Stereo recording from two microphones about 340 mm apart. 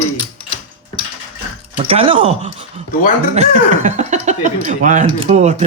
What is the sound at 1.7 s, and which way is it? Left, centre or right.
Speech, centre.